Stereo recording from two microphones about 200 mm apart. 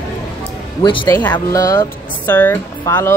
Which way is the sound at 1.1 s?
10° left (ahead or behind).